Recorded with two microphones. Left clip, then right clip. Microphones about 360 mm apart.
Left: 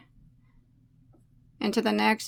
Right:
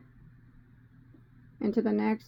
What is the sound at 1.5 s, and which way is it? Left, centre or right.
Speech, left.